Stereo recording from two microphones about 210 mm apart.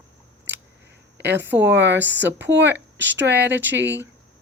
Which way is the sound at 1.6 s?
55° right (ahead or behind).